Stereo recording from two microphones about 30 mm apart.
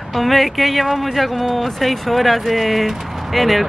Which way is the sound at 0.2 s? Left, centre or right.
Centre.